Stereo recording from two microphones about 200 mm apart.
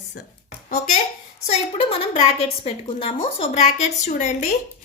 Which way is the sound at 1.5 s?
25° left (ahead or behind).